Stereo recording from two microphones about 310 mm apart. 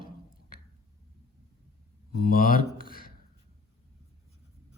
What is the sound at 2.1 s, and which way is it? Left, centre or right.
Speech, left.